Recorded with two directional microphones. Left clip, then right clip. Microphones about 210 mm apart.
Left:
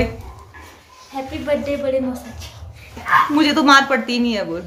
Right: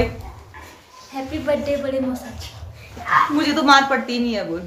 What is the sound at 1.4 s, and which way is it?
A woman's voice, 5° left (ahead or behind).